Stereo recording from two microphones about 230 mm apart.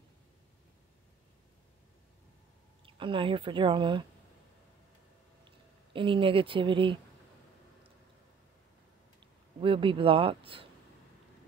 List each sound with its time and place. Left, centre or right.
2.8 s speech: right
5.9 s speech: right
9.2 s speech: right